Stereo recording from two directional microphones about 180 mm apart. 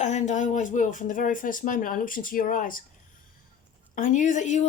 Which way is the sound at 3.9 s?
45° left (ahead or behind).